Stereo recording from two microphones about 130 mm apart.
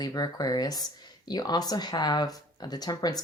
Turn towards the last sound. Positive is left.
turn(degrees=30)  # may be behind; listen again after turning